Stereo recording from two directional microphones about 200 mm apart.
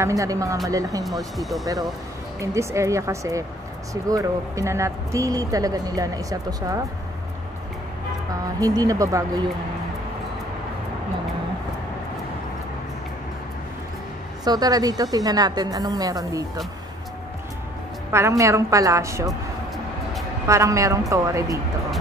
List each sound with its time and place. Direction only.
0.0 s speech: 15° right (ahead or behind)
1.0 s speech: centre (ahead or behind)
2.4 s speech: 15° right (ahead or behind)
8.5 s speech: 15° right (ahead or behind)
14.4 s a woman's voice: 20° right (ahead or behind)
18.4 s speech: 15° right (ahead or behind)
20.4 s speech: 15° right (ahead or behind)